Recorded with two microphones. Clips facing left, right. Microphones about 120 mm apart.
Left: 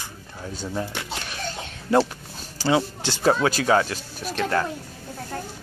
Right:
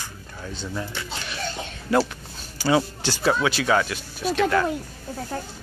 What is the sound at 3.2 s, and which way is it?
Speech, 40° left (ahead or behind).